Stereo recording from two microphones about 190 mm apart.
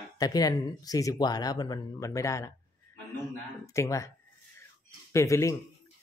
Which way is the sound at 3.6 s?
15° left (ahead or behind).